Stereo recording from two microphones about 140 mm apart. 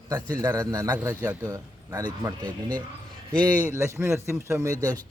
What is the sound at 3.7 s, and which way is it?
A man's voice, 20° right (ahead or behind).